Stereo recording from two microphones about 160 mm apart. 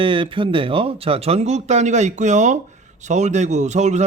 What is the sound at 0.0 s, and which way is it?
A man's voice, 35° right (ahead or behind).